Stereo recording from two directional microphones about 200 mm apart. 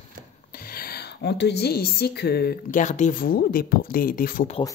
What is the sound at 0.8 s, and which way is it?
A woman's voice, 50° left (ahead or behind).